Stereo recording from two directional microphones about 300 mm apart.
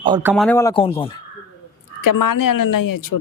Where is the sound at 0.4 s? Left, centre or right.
Centre.